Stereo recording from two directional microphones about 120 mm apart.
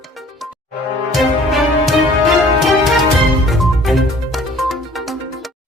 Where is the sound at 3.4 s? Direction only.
Centre (ahead or behind).